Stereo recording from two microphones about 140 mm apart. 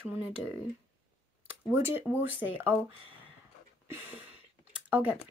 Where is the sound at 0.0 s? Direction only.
15° right (ahead or behind).